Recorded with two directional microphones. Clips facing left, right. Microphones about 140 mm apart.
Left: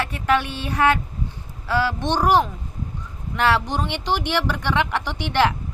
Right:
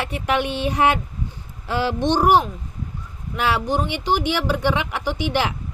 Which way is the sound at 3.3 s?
10° right (ahead or behind).